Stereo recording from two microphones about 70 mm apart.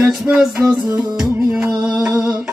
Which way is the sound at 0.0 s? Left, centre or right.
Centre.